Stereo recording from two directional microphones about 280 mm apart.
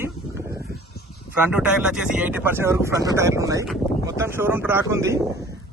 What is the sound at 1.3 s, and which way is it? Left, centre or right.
Speech, centre.